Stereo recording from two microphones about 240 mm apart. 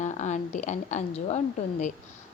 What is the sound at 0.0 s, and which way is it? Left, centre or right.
A woman's voice, left.